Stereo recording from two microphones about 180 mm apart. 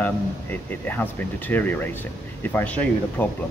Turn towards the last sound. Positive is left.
turn(degrees=10)  # may be behind; listen again after turning